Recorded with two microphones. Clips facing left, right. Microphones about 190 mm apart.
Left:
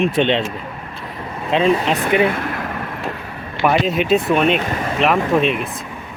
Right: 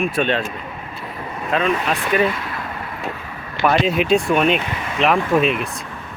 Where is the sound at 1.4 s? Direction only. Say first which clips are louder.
Left 4 dB; 30° left (ahead or behind).